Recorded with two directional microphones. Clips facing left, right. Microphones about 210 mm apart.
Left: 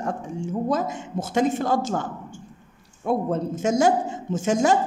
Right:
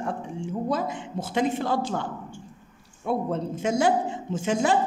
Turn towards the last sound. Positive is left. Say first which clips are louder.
# left 3 dB
turn(degrees=45)  # may be behind; listen again after turning